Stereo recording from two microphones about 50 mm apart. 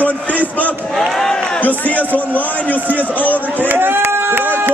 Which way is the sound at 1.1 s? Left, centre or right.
Centre.